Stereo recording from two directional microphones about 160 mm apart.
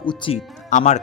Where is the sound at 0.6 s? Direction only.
50° left (ahead or behind).